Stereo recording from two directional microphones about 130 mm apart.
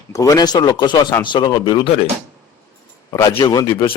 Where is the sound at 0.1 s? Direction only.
25° left (ahead or behind).